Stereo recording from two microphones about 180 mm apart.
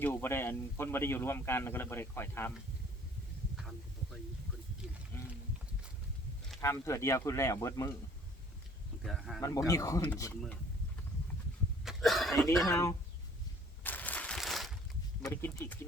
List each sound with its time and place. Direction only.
0.0 s speech: 10° left (ahead or behind)
3.6 s a sound: centre (ahead or behind)
5.1 s wild animals: 15° left (ahead or behind)
6.6 s speech: 15° left (ahead or behind)
9.0 s speech: centre (ahead or behind)
9.4 s speech: 15° left (ahead or behind)
11.9 s a sound: centre (ahead or behind)
12.6 s speech: 15° left (ahead or behind)
13.8 s a sound: 10° left (ahead or behind)
15.2 s speech: 15° left (ahead or behind)